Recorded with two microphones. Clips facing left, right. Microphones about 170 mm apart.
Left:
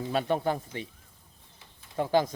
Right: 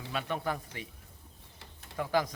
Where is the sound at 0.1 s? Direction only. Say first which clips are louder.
Left 6 dB; 35° left (ahead or behind).